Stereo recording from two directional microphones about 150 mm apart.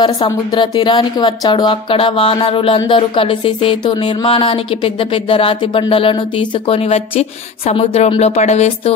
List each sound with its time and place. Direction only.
0.0 s speech: 25° left (ahead or behind); by 8.9 s 45° left (ahead or behind)